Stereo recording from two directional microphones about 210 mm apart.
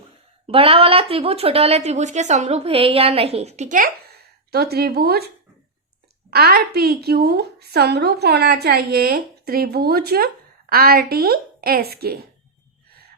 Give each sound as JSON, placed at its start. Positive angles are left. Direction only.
{"t": 0.4, "sound": "a woman's voice", "side_deg": -25}
{"t": 4.5, "sound": "a woman's voice", "side_deg": -50}
{"t": 6.3, "sound": "a woman's voice", "side_deg": -50}